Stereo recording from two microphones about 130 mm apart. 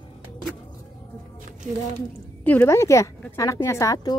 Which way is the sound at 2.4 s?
20° left (ahead or behind).